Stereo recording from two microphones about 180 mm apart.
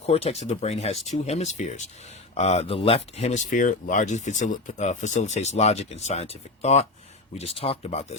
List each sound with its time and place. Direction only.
0.0 s speech: 35° left (ahead or behind)